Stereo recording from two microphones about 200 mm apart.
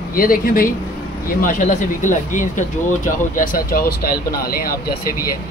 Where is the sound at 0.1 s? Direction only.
45° left (ahead or behind).